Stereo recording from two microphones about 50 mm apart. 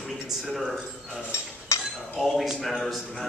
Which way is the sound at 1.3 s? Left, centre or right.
Left.